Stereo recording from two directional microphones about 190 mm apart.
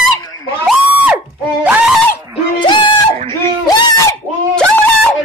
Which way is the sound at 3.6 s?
20° left (ahead or behind).